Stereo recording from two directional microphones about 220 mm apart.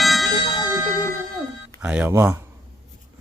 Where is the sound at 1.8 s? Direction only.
5° right (ahead or behind).